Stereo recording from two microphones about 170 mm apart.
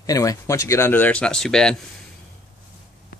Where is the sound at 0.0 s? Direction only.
20° left (ahead or behind); by 1.8 s 5° left (ahead or behind).